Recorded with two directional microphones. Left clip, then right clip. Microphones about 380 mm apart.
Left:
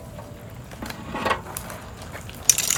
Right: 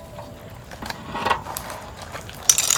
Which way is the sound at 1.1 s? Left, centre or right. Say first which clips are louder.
Right 2 dB; centre.